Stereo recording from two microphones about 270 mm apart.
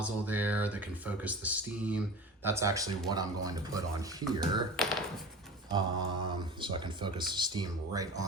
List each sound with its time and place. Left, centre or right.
0.0 s speech: centre
4.8 s speech: centre
6.2 s speech: centre